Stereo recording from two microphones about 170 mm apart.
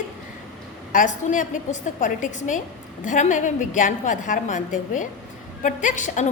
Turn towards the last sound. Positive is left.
turn(degrees=45)  # may be behind; listen again after turning